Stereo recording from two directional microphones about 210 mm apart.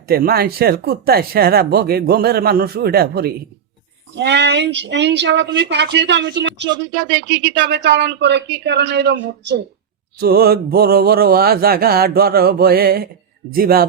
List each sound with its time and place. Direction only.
0.1 s speech: 45° right (ahead or behind)